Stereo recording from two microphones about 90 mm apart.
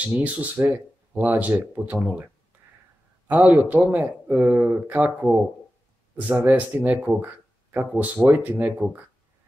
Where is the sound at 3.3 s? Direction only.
15° right (ahead or behind).